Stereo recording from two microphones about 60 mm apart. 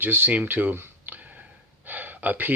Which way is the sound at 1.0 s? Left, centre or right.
Right.